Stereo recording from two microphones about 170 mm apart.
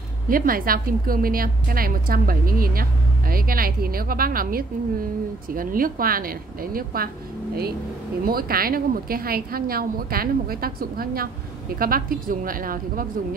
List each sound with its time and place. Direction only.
0.3 s a woman's voice: 55° right (ahead or behind)
8.3 s a woman's voice: 60° right (ahead or behind)